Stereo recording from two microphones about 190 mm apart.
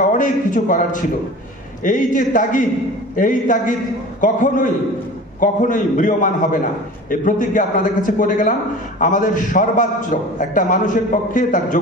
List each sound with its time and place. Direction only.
0.2 s a man's voice: 45° left (ahead or behind)